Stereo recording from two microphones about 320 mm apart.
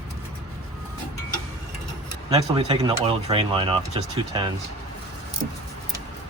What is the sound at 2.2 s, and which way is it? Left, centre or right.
Speech, centre.